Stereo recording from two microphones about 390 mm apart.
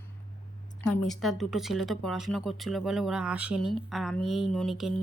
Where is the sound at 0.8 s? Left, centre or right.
Centre.